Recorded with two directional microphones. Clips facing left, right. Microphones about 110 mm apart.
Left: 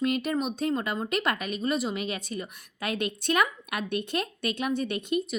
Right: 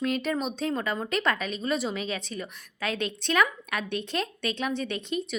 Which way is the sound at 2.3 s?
35° left (ahead or behind).